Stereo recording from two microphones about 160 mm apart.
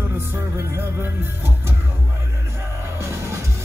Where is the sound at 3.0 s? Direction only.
15° right (ahead or behind).